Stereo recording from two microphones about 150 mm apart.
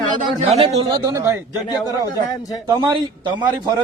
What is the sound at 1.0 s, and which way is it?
Speech, 20° right (ahead or behind).